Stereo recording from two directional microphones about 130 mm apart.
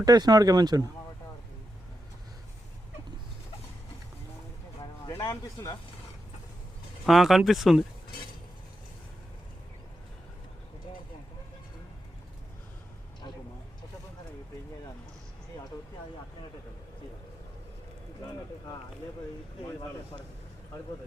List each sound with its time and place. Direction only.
0.0 s speech: 30° right (ahead or behind)
5.0 s a sound: 30° left (ahead or behind)
7.0 s speech: centre (ahead or behind)